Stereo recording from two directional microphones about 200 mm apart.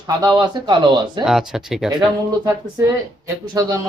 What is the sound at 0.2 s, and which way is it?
Speech, 20° right (ahead or behind).